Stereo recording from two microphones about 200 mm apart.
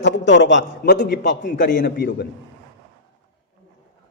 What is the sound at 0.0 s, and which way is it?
A man's voice, 60° left (ahead or behind).